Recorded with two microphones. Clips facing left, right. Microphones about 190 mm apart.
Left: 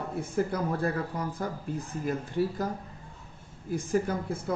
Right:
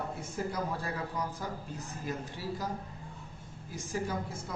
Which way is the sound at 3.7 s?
55° left (ahead or behind).